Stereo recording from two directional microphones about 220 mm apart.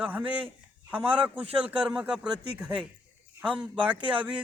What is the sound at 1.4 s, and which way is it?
Speech, 25° right (ahead or behind).